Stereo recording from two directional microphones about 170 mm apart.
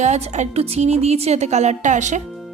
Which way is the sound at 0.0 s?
40° right (ahead or behind).